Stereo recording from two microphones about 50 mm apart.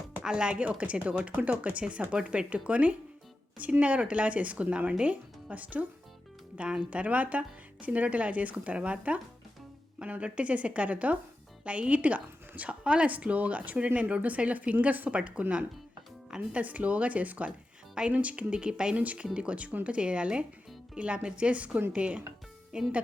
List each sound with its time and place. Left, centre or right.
0.2 s speech: centre
0.8 s speech: right
2.1 s speech: centre
2.5 s speech: right
6.6 s speech: right